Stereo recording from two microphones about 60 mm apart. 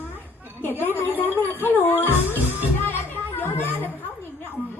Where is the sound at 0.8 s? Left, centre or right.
Left.